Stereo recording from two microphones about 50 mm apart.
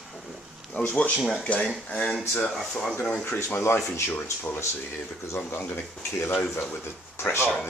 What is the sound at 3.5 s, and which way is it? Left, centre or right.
Speech, left.